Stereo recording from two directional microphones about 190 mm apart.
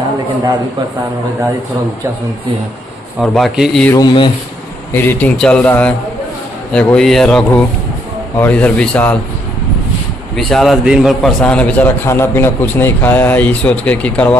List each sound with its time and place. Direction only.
3.2 s speech: centre (ahead or behind)
3.9 s speech: 20° left (ahead or behind)
4.9 s a man's voice: 10° left (ahead or behind)
10.3 s a man's voice: centre (ahead or behind)